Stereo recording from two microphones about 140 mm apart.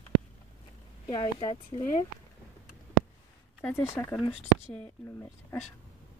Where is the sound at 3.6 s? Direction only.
20° left (ahead or behind).